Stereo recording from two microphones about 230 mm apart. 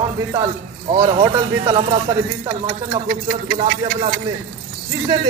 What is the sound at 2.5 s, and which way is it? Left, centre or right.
Speech, right.